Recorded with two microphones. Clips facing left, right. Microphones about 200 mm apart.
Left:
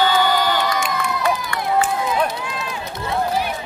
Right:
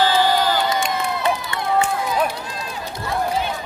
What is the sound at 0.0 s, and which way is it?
Crowd, 25° right (ahead or behind).